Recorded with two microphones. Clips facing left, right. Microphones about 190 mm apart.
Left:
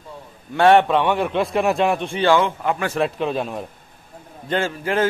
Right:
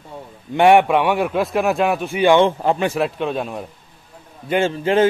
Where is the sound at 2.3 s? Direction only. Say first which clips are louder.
Right 4 dB; 30° right (ahead or behind).